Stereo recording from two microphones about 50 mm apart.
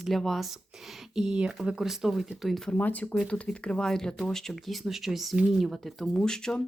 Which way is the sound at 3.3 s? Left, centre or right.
Left.